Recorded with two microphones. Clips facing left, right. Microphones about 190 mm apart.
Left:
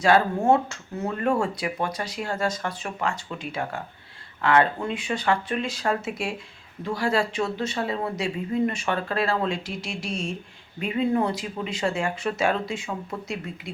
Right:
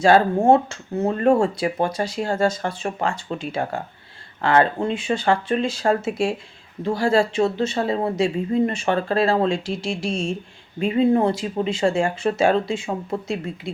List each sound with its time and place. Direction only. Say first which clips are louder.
0.0 s speech: right 5 dB; 30° right (ahead or behind)